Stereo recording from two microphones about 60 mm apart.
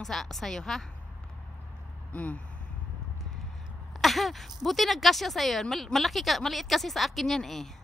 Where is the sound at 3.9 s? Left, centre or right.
Centre.